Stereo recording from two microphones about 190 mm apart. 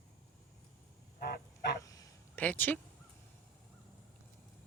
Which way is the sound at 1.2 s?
55° left (ahead or behind).